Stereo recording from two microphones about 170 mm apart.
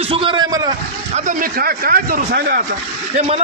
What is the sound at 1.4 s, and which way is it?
A man's voice, 60° right (ahead or behind).